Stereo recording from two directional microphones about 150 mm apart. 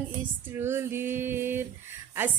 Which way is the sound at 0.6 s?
15° right (ahead or behind).